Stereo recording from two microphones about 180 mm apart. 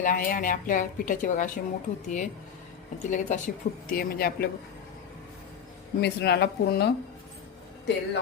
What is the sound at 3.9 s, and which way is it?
Speech, 55° left (ahead or behind).